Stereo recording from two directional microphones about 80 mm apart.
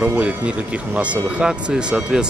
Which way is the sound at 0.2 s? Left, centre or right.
Centre.